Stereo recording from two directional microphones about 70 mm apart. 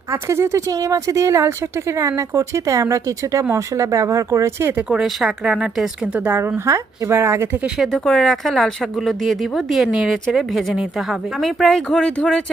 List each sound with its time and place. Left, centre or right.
0.1 s speech: right
4.9 s speech: centre
6.1 s a woman's voice: right
6.7 s speech: right
7.8 s speech: centre